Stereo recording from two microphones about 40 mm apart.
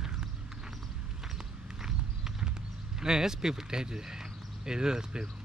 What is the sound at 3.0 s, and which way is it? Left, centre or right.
Speech, centre.